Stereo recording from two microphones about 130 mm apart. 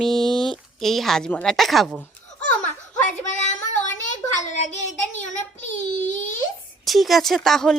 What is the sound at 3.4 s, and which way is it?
Child singing, 70° left (ahead or behind).